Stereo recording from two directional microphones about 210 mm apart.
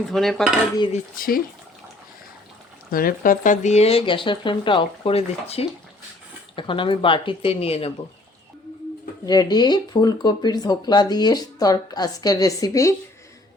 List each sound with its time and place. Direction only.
0.1 s dishes: centre (ahead or behind)
0.9 s speech: 45° left (ahead or behind)
2.9 s speech: 45° left (ahead or behind); by 7.9 s 30° left (ahead or behind)
9.2 s speech: 20° left (ahead or behind)